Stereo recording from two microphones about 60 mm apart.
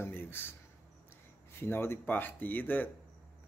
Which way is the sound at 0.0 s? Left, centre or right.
Left.